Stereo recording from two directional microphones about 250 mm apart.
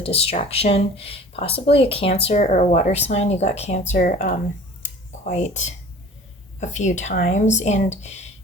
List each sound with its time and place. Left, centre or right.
0.0 s speech: left